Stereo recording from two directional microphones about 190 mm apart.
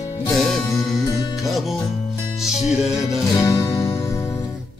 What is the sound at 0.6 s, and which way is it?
Music, 15° left (ahead or behind).